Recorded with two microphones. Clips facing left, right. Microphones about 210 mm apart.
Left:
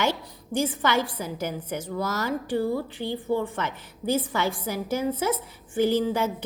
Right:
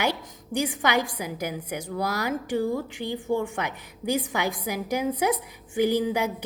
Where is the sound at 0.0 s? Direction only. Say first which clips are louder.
Left 1 dB; 15° right (ahead or behind).